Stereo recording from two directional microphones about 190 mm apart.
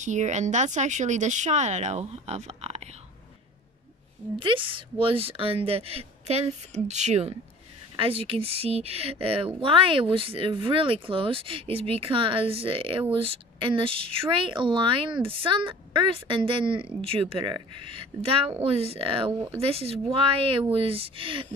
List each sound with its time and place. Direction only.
0.0 s speech: 40° right (ahead or behind)
4.4 s speech: 25° right (ahead or behind)